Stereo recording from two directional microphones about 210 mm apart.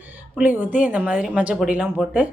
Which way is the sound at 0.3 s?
10° right (ahead or behind).